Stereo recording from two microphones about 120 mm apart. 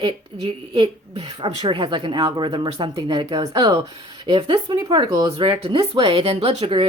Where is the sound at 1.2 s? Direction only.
50° right (ahead or behind).